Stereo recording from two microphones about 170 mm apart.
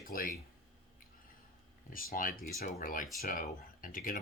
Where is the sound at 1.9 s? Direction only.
55° left (ahead or behind).